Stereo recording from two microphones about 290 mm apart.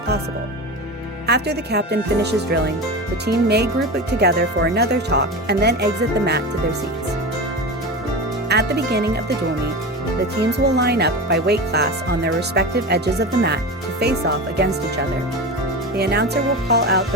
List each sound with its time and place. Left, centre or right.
1.3 s speech: right
8.4 s speech: right
10.4 s speech: right
14.0 s speech: right